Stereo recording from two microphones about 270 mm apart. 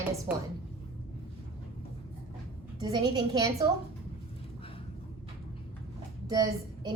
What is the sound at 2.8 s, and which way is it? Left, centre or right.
Speech, centre.